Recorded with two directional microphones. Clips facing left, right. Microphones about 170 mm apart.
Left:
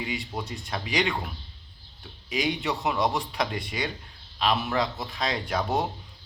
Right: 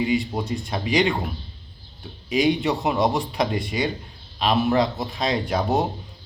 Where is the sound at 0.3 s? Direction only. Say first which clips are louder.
Right 7 dB; 25° right (ahead or behind).